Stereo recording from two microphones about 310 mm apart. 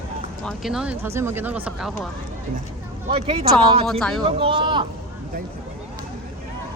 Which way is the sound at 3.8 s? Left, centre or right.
Centre.